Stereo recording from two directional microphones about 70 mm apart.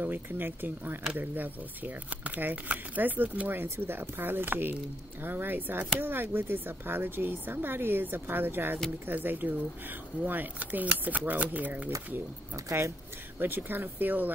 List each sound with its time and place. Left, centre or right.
0.0 s speech: right
12.6 s speech: right
13.4 s speech: right